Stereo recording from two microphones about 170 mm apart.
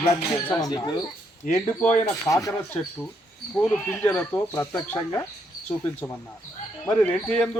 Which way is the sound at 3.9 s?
10° left (ahead or behind).